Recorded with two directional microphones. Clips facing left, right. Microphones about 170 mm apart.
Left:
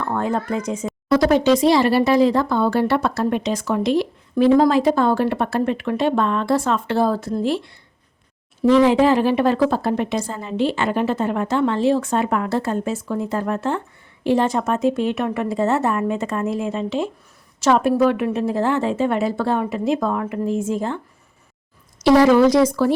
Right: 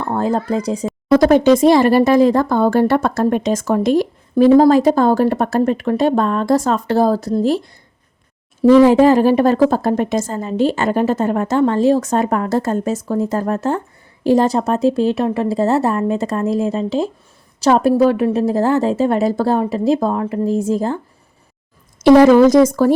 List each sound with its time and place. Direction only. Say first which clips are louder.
0.0 s a woman's voice: right 4 dB; 35° right (ahead or behind)
1.1 s a woman's voice: right 5 dB; 50° right (ahead or behind)
22.0 s speech: right 5 dB; 50° right (ahead or behind)